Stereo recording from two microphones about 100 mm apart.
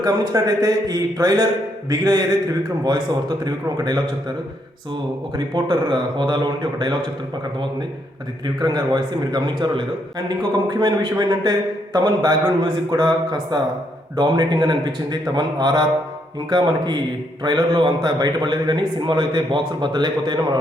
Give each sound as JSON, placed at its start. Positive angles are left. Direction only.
{"t": 0.0, "sound": "a man's voice", "side_deg": -40}
{"t": 5.5, "sound": "a man's voice", "side_deg": -50}
{"t": 8.5, "sound": "a man's voice", "side_deg": -45}